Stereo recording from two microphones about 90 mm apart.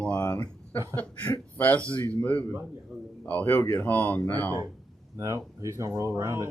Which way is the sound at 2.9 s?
5° right (ahead or behind).